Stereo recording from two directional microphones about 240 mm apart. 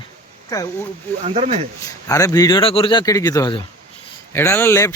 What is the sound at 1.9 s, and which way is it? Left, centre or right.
Speech, centre.